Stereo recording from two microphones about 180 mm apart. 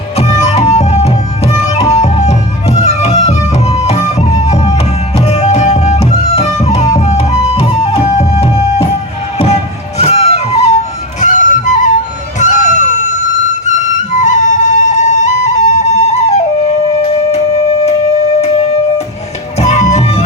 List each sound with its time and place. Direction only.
0.2 s music: 35° left (ahead or behind)
10.0 s music: 35° left (ahead or behind)
12.4 s flute: 40° left (ahead or behind)
18.3 s music: 35° left (ahead or behind)